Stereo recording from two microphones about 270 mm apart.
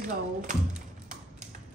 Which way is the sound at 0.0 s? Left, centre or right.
Right.